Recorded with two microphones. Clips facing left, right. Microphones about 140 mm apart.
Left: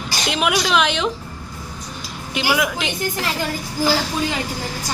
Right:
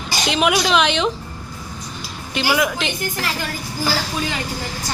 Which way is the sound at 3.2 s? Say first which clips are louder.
Left 2 dB; 20° left (ahead or behind).